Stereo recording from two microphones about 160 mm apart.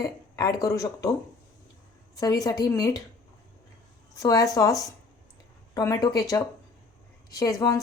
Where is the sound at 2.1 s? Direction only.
20° left (ahead or behind).